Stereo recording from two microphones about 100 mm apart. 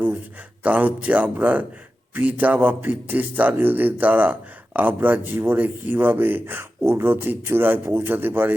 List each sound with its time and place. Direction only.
0.6 s a man's voice: 15° right (ahead or behind)